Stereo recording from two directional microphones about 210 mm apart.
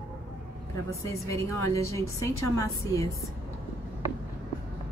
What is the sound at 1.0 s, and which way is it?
A woman's voice, 15° left (ahead or behind).